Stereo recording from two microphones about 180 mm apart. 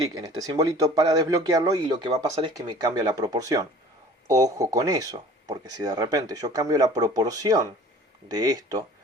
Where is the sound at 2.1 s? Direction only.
35° right (ahead or behind).